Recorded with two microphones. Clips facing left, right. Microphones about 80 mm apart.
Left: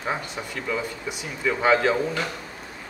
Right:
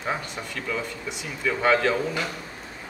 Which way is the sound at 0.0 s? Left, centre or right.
Centre.